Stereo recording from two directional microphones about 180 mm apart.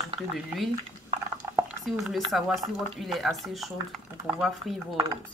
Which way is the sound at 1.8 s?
Centre (ahead or behind).